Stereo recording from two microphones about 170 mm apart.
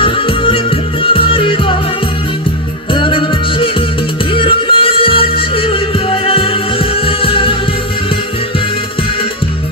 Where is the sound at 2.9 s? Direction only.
30° left (ahead or behind).